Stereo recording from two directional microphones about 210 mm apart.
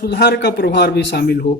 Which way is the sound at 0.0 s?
50° left (ahead or behind).